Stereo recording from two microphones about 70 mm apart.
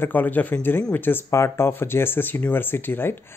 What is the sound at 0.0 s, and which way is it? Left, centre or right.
Speech, left.